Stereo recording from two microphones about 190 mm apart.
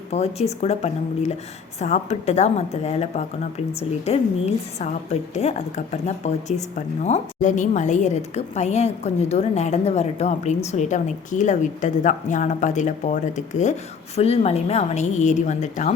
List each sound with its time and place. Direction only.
0.1 s a woman's voice: 35° left (ahead or behind)